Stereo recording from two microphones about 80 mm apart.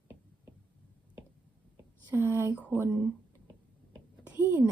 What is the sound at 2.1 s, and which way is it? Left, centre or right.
Speech, right.